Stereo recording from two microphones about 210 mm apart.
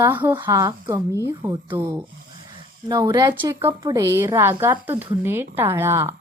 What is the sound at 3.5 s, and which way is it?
A woman's voice, 15° right (ahead or behind).